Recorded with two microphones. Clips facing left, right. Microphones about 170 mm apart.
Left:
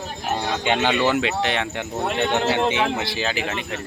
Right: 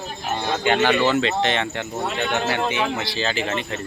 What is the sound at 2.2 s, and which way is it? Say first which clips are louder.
Speech: left 3 dB; 20° left (ahead or behind).